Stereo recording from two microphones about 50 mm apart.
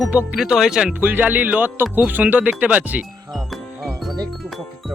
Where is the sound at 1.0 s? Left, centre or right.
Right.